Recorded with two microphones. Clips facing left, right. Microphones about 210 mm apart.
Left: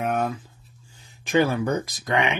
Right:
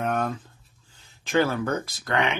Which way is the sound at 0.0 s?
10° left (ahead or behind).